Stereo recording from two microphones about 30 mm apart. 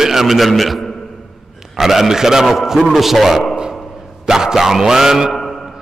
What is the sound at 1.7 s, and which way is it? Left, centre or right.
A man's voice, centre.